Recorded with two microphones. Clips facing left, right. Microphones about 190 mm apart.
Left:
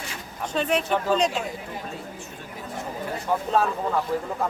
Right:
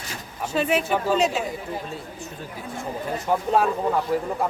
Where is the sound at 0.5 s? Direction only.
5° right (ahead or behind).